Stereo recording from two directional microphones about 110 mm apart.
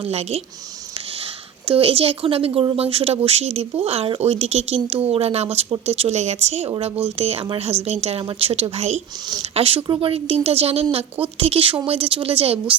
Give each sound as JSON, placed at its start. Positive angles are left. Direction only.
{"t": 0.0, "sound": "speech", "side_deg": -70}
{"t": 1.6, "sound": "a woman's voice", "side_deg": -55}
{"t": 8.2, "sound": "a woman's voice", "side_deg": -55}
{"t": 9.4, "sound": "a woman's voice", "side_deg": -65}
{"t": 9.8, "sound": "speech", "side_deg": -45}
{"t": 10.1, "sound": "a woman's voice", "side_deg": -60}